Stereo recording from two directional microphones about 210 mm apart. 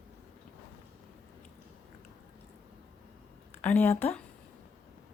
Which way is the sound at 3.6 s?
10° left (ahead or behind).